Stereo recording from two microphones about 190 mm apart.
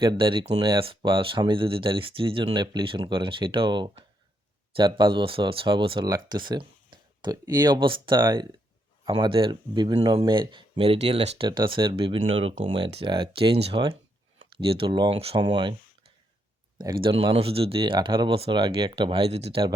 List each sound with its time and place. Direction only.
0.0 s speech: 25° right (ahead or behind)
16.7 s speech: 25° right (ahead or behind)